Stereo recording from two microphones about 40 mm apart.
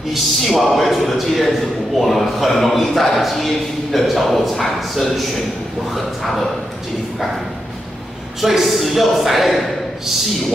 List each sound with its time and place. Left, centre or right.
0.1 s a man's voice: centre
8.4 s a man's voice: centre